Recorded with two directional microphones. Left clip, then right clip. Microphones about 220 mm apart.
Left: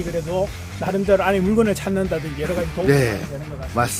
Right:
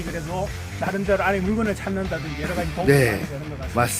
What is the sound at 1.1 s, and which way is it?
Speech, 60° left (ahead or behind).